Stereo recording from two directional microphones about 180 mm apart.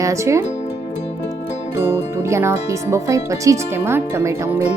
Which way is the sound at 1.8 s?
15° right (ahead or behind).